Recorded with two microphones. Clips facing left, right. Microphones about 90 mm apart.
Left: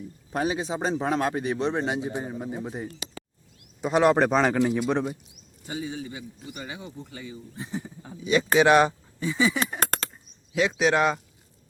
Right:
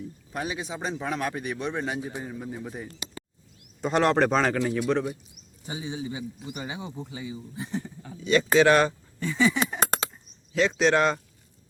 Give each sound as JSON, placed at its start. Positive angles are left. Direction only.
{"t": 0.3, "sound": "a man's voice", "side_deg": 35}
{"t": 3.8, "sound": "a man's voice", "side_deg": 5}
{"t": 5.6, "sound": "speech", "side_deg": -20}
{"t": 7.5, "sound": "a man's voice", "side_deg": 0}